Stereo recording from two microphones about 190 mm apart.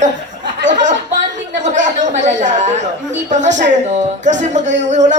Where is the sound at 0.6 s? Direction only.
40° right (ahead or behind).